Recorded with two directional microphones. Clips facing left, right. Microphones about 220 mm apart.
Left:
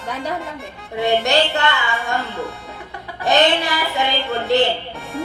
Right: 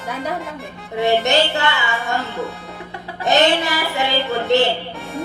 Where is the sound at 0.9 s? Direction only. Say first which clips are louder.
Right 1 dB; centre (ahead or behind).